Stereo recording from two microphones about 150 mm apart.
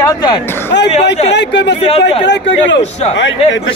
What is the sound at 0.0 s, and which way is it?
Speech, 25° left (ahead or behind).